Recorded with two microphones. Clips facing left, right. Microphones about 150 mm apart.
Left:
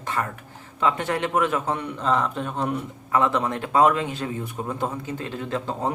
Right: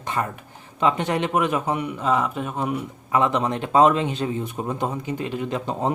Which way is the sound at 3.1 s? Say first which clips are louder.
Right 1 dB; 20° right (ahead or behind).